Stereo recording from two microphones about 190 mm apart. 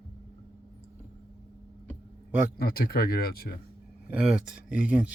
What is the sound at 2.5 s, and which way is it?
Speech, 50° left (ahead or behind).